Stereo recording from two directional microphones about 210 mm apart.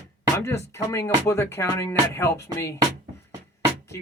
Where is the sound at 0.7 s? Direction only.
15° left (ahead or behind).